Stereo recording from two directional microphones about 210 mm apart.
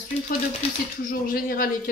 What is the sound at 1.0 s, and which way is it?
Speech, 40° left (ahead or behind).